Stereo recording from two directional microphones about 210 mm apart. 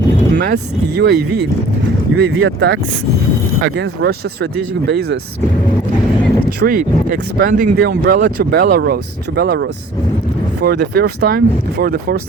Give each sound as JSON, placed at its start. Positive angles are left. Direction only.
{"t": 0.3, "sound": "speech", "side_deg": -50}
{"t": 2.1, "sound": "speech", "side_deg": -60}
{"t": 6.6, "sound": "speech", "side_deg": -40}